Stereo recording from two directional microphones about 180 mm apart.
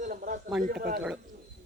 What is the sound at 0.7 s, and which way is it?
Speech, 60° right (ahead or behind).